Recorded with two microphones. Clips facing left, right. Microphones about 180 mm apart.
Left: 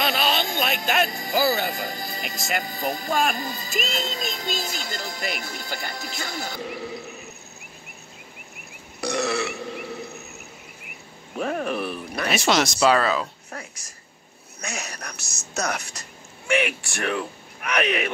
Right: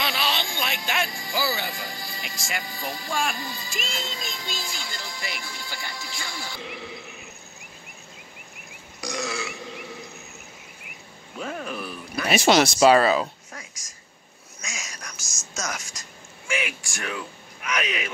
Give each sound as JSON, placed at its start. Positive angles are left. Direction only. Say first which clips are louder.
{"t": 0.0, "sound": "music", "louder": "left 4 dB", "side_deg": 45}
{"t": 1.2, "sound": "speech", "louder": "left 6 dB", "side_deg": 45}
{"t": 9.0, "sound": "burping", "louder": "left 6 dB", "side_deg": 65}
{"t": 11.3, "sound": "a sound", "louder": "left 6 dB", "side_deg": 60}
{"t": 12.6, "sound": "speech", "louder": "right 3 dB", "side_deg": -25}
{"t": 13.5, "sound": "a sound", "louder": "left 5 dB", "side_deg": 65}
{"t": 14.6, "sound": "speech", "louder": "left 6 dB", "side_deg": 65}